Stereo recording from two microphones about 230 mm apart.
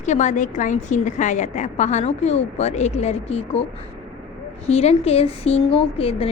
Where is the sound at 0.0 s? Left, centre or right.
Left.